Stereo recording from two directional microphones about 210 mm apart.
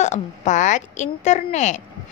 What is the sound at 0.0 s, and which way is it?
Speech, 35° left (ahead or behind).